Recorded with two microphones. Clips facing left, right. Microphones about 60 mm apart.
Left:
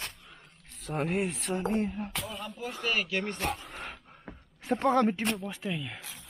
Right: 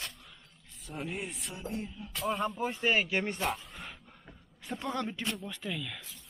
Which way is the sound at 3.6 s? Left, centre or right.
Left.